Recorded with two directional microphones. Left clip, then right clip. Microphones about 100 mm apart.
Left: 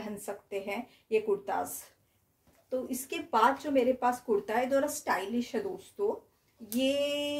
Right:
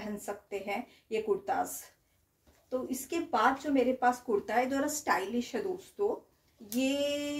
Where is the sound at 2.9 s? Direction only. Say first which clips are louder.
Left 2 dB; 40° left (ahead or behind).